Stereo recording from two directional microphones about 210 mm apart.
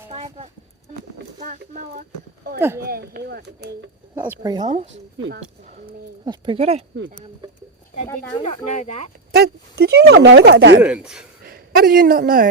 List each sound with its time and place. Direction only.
0.1 s speech: 30° right (ahead or behind)
1.4 s speech: 40° right (ahead or behind)
2.6 s speech: 10° right (ahead or behind)
2.8 s speech: 45° right (ahead or behind)
4.1 s speech: 10° right (ahead or behind)
5.1 s speech: 65° right (ahead or behind)
6.2 s speech: 25° right (ahead or behind)
8.4 s speech: 35° left (ahead or behind)
9.3 s speech: 50° right (ahead or behind)
10.8 s a man's voice: 5° right (ahead or behind)
11.4 s a woman's voice: 45° right (ahead or behind)